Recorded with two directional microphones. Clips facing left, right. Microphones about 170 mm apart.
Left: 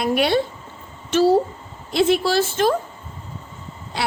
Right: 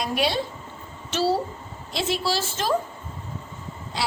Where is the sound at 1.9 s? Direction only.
55° left (ahead or behind).